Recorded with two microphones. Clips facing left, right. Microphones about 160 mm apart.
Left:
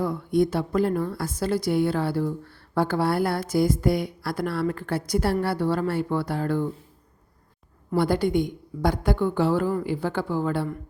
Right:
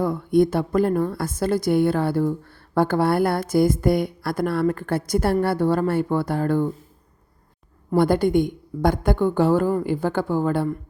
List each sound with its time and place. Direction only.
0.0 s a woman's voice: 50° right (ahead or behind)
7.9 s a woman's voice: 50° right (ahead or behind)